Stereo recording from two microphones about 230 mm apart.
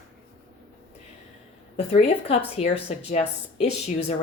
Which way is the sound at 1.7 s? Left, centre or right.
Left.